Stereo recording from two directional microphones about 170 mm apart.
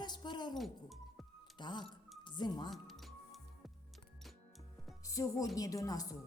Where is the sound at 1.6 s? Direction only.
25° left (ahead or behind).